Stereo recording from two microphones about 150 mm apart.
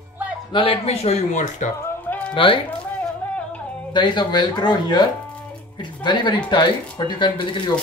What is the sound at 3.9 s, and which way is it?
Speech, 30° left (ahead or behind).